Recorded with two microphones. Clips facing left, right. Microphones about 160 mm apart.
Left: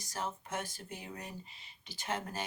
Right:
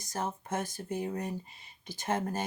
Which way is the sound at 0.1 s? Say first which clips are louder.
Right 5 dB; 45° right (ahead or behind).